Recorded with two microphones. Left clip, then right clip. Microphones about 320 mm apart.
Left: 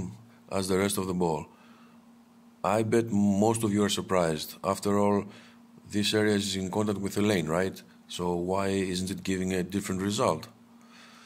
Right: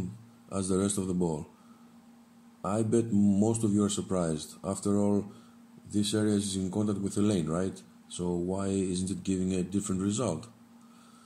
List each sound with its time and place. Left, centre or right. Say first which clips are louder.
0.5 s speech: left 3 dB; left
2.6 s speech: left 4 dB; left
3.2 s speech: left 3 dB; left
3.5 s speech: left 2 dB; left
6.6 s speech: left 3 dB; left
7.1 s speech: left 3 dB; left
8.2 s speech: left 3 dB; left
8.5 s speech: left 3 dB; left